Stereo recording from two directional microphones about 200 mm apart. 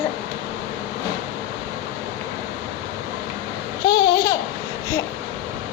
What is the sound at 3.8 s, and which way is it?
Babbling, 20° left (ahead or behind).